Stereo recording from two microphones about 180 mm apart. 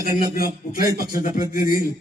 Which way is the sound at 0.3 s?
55° left (ahead or behind).